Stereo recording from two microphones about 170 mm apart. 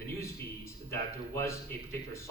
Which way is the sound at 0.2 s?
15° left (ahead or behind).